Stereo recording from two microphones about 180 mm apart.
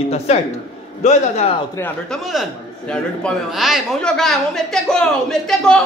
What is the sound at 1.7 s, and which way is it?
Speech, 10° left (ahead or behind).